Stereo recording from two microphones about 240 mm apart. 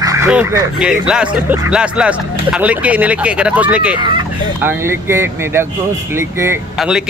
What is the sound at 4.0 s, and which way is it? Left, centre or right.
Speech, centre.